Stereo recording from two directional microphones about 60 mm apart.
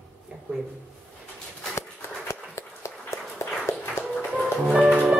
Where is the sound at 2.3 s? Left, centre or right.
Left.